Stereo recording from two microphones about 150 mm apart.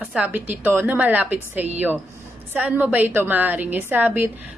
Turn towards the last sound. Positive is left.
turn(degrees=-15)  # may be behind; listen again after turning